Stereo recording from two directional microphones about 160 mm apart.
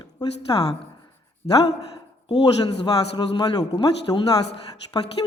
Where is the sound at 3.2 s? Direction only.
25° left (ahead or behind).